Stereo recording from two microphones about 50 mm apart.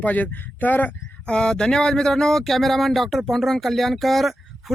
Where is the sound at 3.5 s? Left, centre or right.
Centre.